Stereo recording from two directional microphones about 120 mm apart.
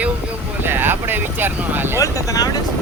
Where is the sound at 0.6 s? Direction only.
15° right (ahead or behind).